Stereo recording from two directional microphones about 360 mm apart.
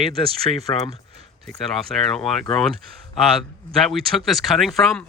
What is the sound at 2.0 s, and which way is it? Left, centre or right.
Speech, centre.